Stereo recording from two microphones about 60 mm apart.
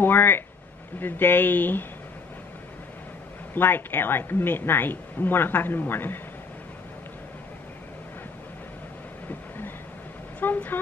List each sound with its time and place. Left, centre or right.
0.0 s a woman's voice: left
3.5 s a woman's voice: left
10.4 s speech: left